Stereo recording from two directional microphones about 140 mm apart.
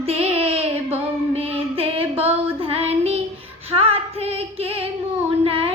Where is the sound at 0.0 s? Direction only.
45° right (ahead or behind).